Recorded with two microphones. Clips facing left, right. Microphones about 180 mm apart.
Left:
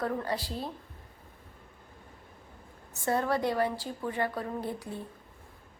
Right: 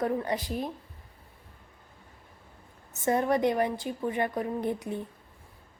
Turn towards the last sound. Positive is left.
turn(degrees=-20)  # may be behind; listen again after turning